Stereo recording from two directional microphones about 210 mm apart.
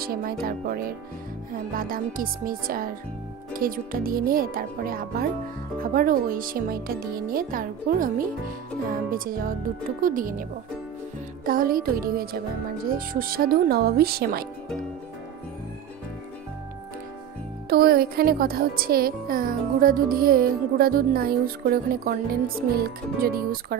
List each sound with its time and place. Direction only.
0.0 s speech: 45° right (ahead or behind)
1.8 s speech: 45° right (ahead or behind)
9.1 s speech: 45° right (ahead or behind)
11.4 s speech: 45° right (ahead or behind)
17.6 s speech: 45° right (ahead or behind)